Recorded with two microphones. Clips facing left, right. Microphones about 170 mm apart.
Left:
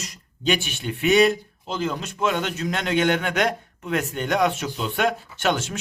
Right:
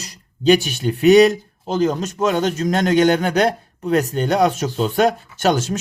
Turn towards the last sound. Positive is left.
turn(degrees=-40)  # may be behind; listen again after turning